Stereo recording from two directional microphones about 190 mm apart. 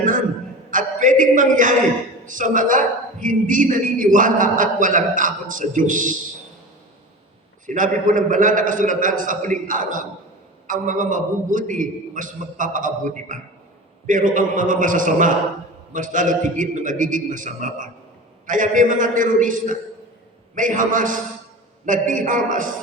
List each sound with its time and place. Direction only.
0.7 s a sound: 45° right (ahead or behind)
2.2 s a woman's voice: 45° right (ahead or behind)
7.7 s a woman's voice: 45° right (ahead or behind)